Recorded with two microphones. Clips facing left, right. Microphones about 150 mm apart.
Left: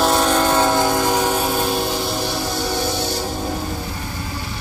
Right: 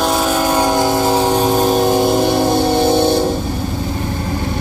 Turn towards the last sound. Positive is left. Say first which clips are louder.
# right 10 dB
turn(degrees=-55)  # may be behind; listen again after turning